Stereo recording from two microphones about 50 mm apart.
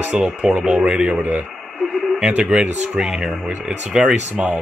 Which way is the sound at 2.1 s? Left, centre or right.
Right.